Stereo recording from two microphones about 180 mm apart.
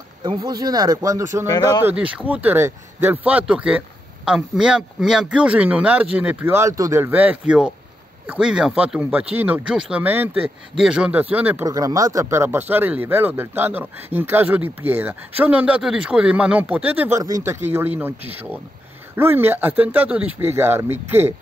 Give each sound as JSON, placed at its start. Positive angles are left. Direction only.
{"t": 0.2, "sound": "speech", "side_deg": -25}
{"t": 1.5, "sound": "speech", "side_deg": 25}
{"t": 1.9, "sound": "speech", "side_deg": -5}
{"t": 11.6, "sound": "speech", "side_deg": -20}